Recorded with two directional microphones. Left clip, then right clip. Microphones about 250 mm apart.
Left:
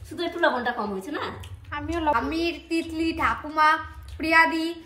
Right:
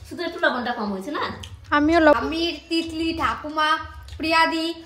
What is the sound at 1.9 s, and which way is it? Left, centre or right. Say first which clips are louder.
Speech: right 9 dB; right.